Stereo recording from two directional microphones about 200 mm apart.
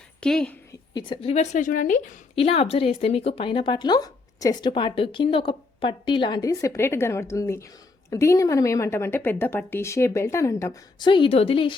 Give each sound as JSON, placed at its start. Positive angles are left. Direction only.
{"t": 0.2, "sound": "a woman's voice", "side_deg": 5}
{"t": 0.9, "sound": "a woman's voice", "side_deg": 20}
{"t": 2.3, "sound": "a woman's voice", "side_deg": 30}